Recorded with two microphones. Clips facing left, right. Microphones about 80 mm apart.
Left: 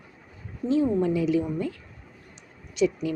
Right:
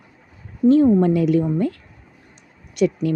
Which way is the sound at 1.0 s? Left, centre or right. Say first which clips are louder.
Right 6 dB; right.